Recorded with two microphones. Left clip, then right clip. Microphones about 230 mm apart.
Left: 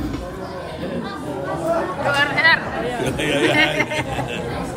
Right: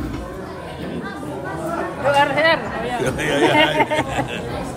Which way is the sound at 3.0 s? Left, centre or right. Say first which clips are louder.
Right 2 dB; centre.